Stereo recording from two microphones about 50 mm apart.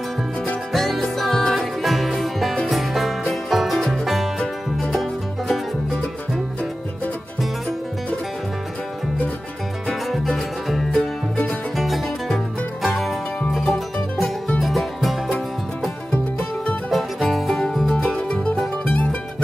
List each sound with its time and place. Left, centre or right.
0.7 s music: centre
9.8 s music: centre
16.1 s music: left
16.9 s music: centre
18.3 s music: left